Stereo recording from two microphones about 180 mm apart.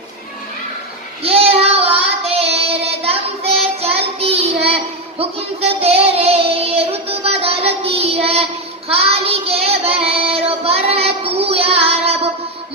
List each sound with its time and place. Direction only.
1.2 s child singing: 35° right (ahead or behind)